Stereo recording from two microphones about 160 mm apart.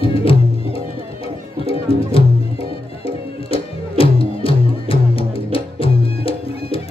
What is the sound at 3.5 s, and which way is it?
Music, 35° left (ahead or behind).